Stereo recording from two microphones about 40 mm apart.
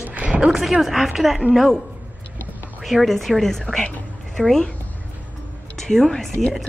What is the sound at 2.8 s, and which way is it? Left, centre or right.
Speech, centre.